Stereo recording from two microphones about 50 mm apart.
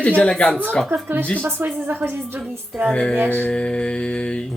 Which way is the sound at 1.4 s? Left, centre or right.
Right.